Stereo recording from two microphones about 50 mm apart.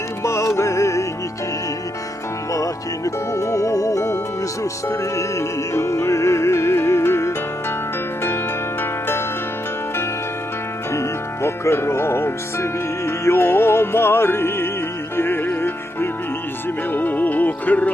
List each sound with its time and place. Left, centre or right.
0.2 s music: left
3.0 s music: left
8.8 s music: left
11.4 s music: left
16.9 s music: left